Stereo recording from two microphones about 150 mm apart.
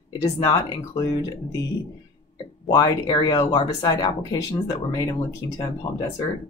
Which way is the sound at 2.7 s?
25° left (ahead or behind).